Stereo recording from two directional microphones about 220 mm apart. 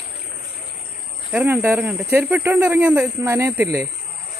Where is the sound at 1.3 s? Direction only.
5° right (ahead or behind).